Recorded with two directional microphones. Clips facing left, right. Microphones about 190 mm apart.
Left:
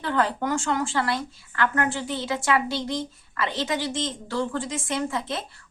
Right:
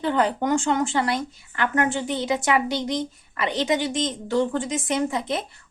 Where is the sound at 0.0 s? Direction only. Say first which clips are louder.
Right 3 dB; 20° right (ahead or behind).